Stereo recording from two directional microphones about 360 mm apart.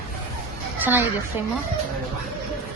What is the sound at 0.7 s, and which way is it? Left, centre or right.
Speech, centre.